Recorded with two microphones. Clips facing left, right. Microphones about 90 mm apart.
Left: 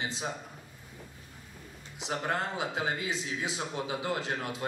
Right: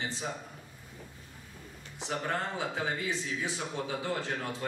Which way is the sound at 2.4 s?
15° left (ahead or behind).